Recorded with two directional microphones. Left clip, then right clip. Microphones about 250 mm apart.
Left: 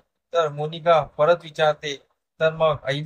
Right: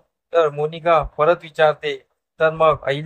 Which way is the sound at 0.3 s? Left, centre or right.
Centre.